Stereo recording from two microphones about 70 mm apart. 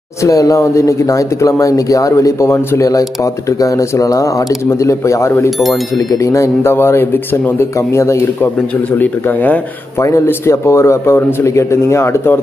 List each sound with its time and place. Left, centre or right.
0.2 s speech: left
2.8 s speech: left
6.7 s a man's voice: left
8.9 s speech: left
9.9 s speech: left